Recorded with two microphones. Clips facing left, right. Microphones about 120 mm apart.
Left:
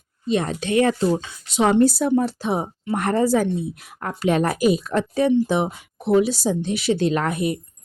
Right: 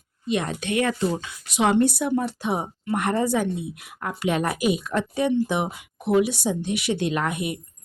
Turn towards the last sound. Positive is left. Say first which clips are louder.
# left 4 dB
turn(degrees=35)  # may be behind; listen again after turning